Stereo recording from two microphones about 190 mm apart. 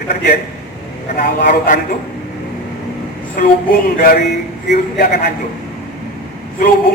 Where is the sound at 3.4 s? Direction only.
50° left (ahead or behind).